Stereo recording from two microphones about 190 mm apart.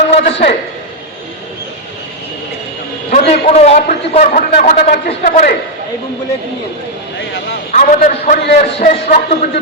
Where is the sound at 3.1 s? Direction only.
35° left (ahead or behind).